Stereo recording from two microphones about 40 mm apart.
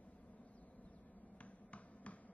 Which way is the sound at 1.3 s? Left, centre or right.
Left.